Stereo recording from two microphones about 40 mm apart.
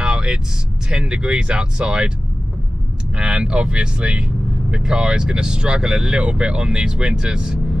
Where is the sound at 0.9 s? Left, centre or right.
Right.